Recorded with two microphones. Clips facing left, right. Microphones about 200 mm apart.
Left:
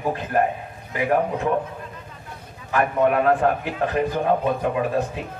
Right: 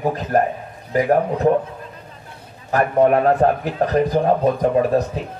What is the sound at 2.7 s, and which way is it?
A man's voice, 40° right (ahead or behind).